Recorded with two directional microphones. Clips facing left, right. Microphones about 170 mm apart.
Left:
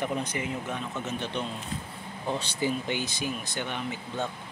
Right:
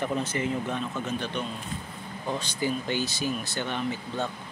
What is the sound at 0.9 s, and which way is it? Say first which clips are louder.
Speech: right 1 dB; 20° left (ahead or behind).